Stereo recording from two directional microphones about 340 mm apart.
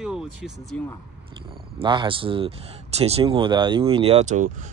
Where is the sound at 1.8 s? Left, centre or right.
Centre.